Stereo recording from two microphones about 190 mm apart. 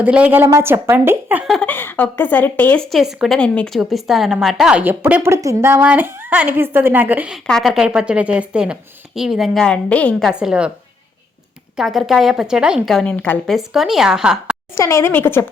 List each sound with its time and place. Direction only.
0.0 s a woman's voice: 10° right (ahead or behind)
11.8 s a woman's voice: centre (ahead or behind)
14.8 s a woman's voice: 15° left (ahead or behind)